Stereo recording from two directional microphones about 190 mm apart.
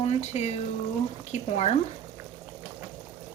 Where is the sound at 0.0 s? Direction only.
35° left (ahead or behind).